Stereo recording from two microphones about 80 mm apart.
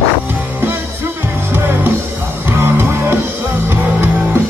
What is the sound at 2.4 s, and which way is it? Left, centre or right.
Music, right.